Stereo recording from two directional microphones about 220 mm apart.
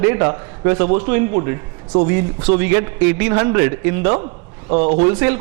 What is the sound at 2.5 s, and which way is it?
Speech, 15° right (ahead or behind).